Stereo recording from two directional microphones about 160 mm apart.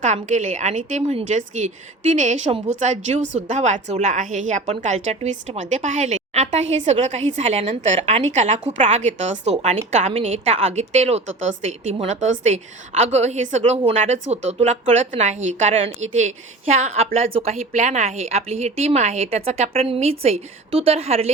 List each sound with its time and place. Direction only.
0.0 s a woman's voice: 50° right (ahead or behind)